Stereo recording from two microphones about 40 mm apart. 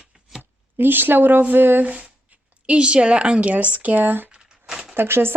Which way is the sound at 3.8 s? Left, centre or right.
Right.